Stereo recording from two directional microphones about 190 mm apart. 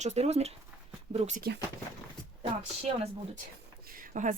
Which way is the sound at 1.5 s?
60° right (ahead or behind).